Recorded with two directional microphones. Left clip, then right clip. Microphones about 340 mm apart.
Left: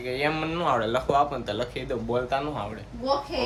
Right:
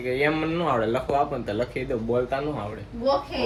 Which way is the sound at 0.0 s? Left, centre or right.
Centre.